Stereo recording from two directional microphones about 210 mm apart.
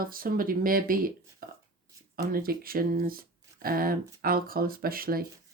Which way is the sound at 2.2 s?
45° right (ahead or behind).